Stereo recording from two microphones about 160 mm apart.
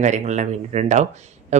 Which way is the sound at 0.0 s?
50° right (ahead or behind).